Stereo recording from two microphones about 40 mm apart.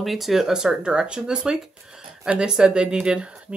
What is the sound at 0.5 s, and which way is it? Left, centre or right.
Speech, centre.